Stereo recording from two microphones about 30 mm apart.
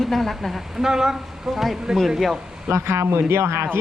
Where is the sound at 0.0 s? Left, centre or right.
Centre.